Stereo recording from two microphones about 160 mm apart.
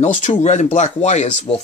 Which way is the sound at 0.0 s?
50° left (ahead or behind).